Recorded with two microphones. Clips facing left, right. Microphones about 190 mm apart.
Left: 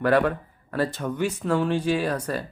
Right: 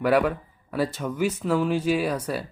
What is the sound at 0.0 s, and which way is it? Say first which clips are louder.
Speech: even; 10° right (ahead or behind).